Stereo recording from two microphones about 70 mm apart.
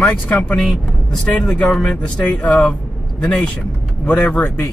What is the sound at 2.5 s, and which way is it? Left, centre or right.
Speech, left.